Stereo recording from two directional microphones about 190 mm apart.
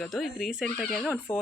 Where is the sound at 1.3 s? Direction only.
15° left (ahead or behind).